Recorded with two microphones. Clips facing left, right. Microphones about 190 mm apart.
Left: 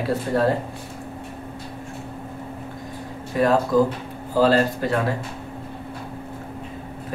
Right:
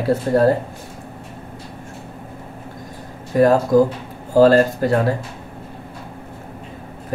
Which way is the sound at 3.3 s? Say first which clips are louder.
Right 5 dB; 40° right (ahead or behind).